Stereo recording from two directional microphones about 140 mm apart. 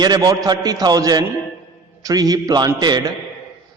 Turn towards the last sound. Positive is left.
turn(degrees=-30)  # may be behind; listen again after turning